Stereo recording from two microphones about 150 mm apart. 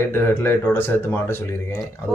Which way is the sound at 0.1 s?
15° left (ahead or behind).